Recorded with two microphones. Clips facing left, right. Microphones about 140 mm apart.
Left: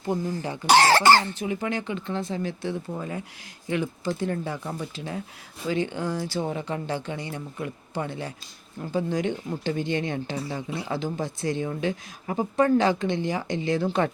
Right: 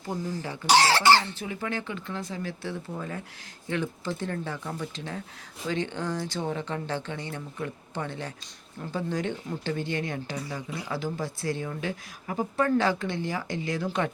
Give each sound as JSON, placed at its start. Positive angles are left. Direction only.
{"t": 0.7, "sound": "speech", "side_deg": 50}
{"t": 1.4, "sound": "speech", "side_deg": 20}